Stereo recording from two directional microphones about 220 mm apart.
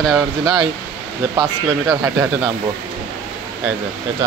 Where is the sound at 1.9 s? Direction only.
5° right (ahead or behind).